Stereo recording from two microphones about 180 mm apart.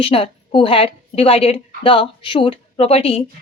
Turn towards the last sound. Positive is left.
turn(degrees=35)  # may be behind; listen again after turning